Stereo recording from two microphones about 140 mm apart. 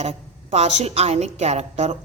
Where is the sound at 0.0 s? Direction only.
50° right (ahead or behind).